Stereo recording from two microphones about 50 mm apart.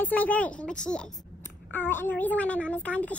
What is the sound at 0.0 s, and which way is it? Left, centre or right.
Speech, left.